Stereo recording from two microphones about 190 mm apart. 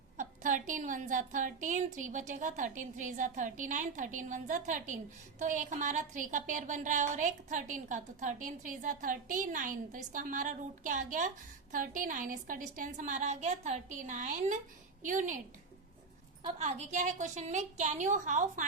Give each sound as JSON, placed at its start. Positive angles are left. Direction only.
{"t": 0.2, "sound": "a woman's voice", "side_deg": -40}
{"t": 16.6, "sound": "a woman's voice", "side_deg": -35}